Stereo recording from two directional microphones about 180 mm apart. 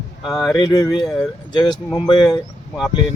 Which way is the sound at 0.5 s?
25° left (ahead or behind).